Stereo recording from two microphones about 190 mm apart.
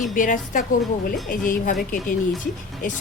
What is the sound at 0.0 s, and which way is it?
Speech, 45° left (ahead or behind).